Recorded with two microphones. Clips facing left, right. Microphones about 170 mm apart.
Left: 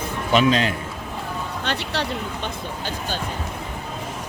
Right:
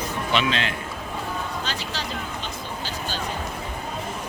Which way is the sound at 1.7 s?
65° left (ahead or behind).